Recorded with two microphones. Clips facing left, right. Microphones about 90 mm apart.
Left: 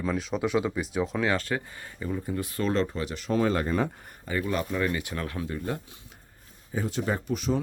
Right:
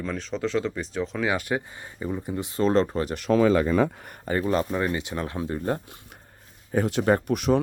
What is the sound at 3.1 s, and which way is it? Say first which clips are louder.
Speech: right 6 dB; 75° right (ahead or behind).